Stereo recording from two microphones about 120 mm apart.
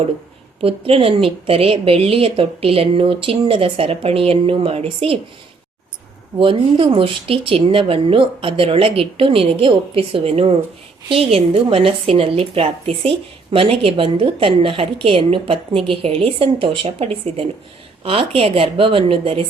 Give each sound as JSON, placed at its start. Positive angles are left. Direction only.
{"t": 0.6, "sound": "a woman's voice", "side_deg": -55}
{"t": 6.4, "sound": "a woman's voice", "side_deg": -50}